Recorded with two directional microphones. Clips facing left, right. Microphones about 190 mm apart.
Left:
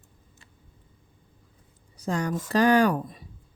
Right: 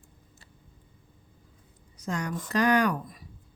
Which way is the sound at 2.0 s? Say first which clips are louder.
Left 4 dB; 30° left (ahead or behind).